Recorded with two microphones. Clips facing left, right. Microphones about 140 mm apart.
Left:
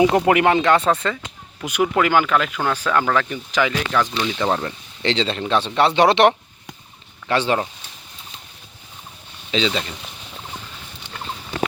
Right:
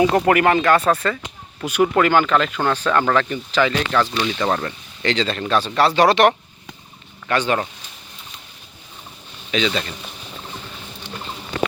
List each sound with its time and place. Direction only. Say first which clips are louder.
0.0 s speech: even; 15° left (ahead or behind)
5.0 s speech: even; 25° left (ahead or behind)
9.5 s speech: even; 20° left (ahead or behind)